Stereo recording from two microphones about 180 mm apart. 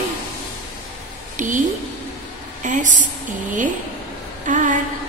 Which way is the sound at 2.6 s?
45° right (ahead or behind).